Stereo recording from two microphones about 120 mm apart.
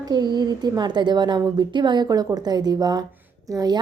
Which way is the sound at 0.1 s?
35° right (ahead or behind).